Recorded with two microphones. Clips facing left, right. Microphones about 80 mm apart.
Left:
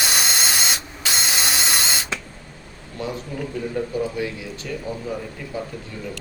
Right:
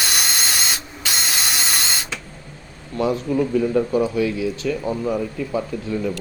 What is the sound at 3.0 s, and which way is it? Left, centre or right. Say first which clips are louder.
Speech: right 8 dB; right.